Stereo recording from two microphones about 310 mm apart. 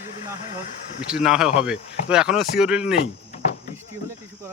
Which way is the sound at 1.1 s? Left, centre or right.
Centre.